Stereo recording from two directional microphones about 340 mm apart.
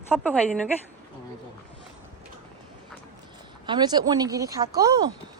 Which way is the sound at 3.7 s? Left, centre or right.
Centre.